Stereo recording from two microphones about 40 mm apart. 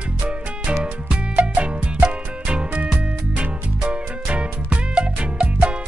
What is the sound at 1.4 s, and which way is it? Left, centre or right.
Music, right.